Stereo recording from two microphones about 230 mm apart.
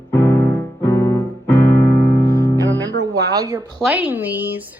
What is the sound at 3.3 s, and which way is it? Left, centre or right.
Speech, centre.